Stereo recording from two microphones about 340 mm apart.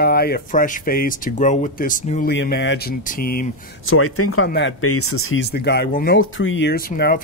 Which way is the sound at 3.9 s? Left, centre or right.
Left.